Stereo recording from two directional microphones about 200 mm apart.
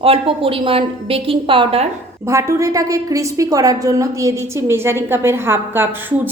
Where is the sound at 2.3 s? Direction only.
15° right (ahead or behind).